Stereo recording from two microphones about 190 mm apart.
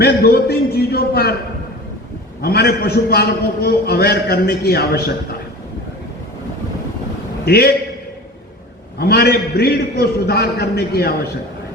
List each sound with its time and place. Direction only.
0.0 s a man's voice: 55° left (ahead or behind)
2.4 s a man's voice: 55° left (ahead or behind)
7.4 s a man's voice: 55° left (ahead or behind)
9.0 s a man's voice: 55° left (ahead or behind)